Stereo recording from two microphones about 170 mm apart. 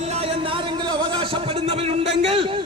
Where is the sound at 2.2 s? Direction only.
35° right (ahead or behind).